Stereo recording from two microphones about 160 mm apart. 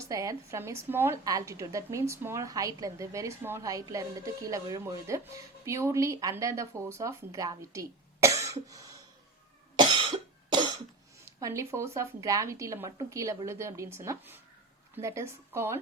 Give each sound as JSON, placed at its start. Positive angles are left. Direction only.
{"t": 0.0, "sound": "a woman's voice", "side_deg": -20}
{"t": 9.7, "sound": "cough", "side_deg": -30}
{"t": 11.3, "sound": "a woman's voice", "side_deg": -20}